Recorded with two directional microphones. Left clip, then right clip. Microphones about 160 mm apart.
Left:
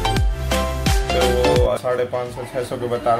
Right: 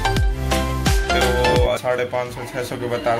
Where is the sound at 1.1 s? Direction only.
Centre (ahead or behind).